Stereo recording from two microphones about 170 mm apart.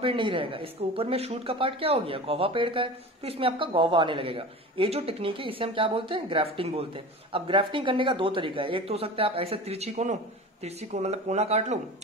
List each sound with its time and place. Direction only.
0.0 s speech: 30° right (ahead or behind)